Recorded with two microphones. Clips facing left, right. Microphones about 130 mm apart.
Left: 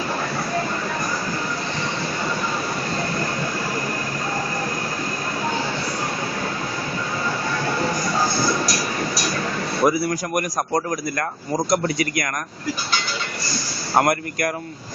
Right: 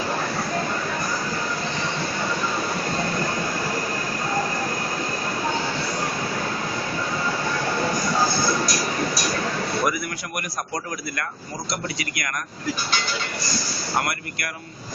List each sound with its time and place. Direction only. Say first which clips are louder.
9.8 s speech: left 9 dB; 30° left (ahead or behind)
10.3 s a man's voice: left 6 dB; 45° left (ahead or behind)
13.9 s a man's voice: left 8 dB; 45° left (ahead or behind)